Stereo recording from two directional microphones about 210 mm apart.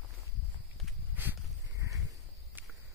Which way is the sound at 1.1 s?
10° right (ahead or behind).